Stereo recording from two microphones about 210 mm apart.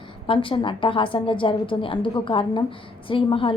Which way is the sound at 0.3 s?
25° left (ahead or behind).